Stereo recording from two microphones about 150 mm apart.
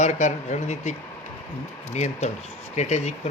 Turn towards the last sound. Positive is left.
turn(degrees=50)  # may be behind; listen again after turning